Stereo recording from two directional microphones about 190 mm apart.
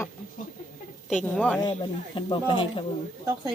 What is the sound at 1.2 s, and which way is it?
Speech, 5° left (ahead or behind).